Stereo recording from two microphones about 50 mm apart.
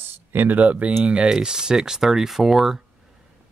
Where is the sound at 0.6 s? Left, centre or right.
Right; by 2.8 s centre.